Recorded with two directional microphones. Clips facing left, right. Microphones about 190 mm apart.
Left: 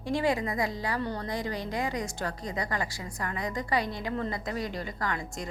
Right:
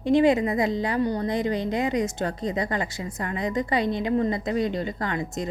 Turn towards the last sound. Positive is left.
turn(degrees=-20)  # may be behind; listen again after turning